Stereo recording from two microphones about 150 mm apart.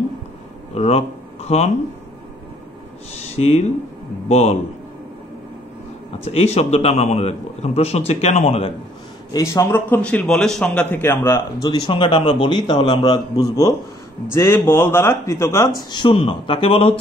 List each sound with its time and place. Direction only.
0.7 s speech: 45° left (ahead or behind)
3.2 s a man's voice: 45° left (ahead or behind)
6.2 s a man's voice: 45° left (ahead or behind)
9.3 s a man's voice: 20° left (ahead or behind)
15.9 s speech: 35° left (ahead or behind)